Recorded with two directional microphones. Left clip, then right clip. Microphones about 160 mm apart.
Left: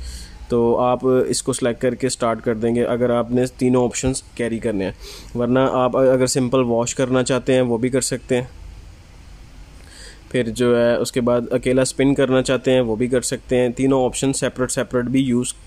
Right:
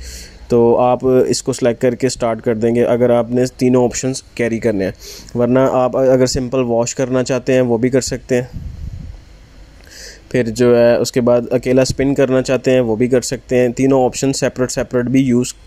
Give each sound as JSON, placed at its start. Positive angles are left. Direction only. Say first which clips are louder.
{"t": 0.1, "sound": "speech", "louder": "right 6 dB", "side_deg": -15}
{"t": 5.0, "sound": "speech", "louder": "right 5 dB", "side_deg": -5}
{"t": 5.4, "sound": "speech", "louder": "right 4 dB", "side_deg": -15}
{"t": 10.0, "sound": "speech", "louder": "right 4 dB", "side_deg": -15}